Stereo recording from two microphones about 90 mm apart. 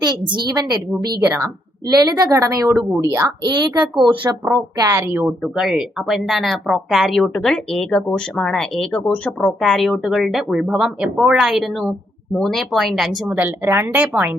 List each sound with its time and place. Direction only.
0.0 s a woman's voice: 55° right (ahead or behind); by 2.7 s 40° right (ahead or behind)
2.9 s speech: 30° right (ahead or behind)
3.4 s a woman's voice: 55° right (ahead or behind)
4.8 s a woman's voice: 35° right (ahead or behind)
5.0 s speech: 20° right (ahead or behind)
5.4 s speech: 5° right (ahead or behind)
13.2 s a woman's voice: 15° right (ahead or behind)